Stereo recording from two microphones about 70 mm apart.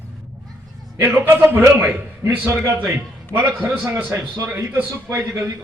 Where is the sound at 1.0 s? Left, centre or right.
Right.